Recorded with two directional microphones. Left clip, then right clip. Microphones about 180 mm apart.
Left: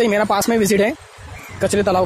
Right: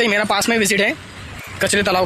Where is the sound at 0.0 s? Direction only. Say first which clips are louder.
Even; 10° left (ahead or behind).